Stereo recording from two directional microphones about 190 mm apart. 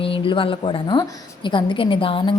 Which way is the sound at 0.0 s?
30° left (ahead or behind).